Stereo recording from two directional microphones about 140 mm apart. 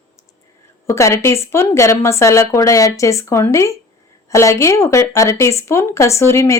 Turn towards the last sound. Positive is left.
turn(degrees=20)  # may be behind; listen again after turning